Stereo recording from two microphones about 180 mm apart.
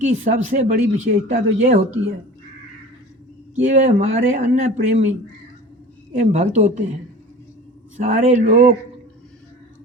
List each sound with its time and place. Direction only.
0.0 s speech: 40° right (ahead or behind)
3.5 s speech: 40° right (ahead or behind)
6.1 s speech: 40° right (ahead or behind)
7.9 s speech: 40° right (ahead or behind)